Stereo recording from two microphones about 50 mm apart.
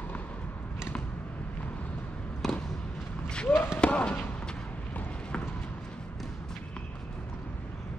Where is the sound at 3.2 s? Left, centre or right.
Centre.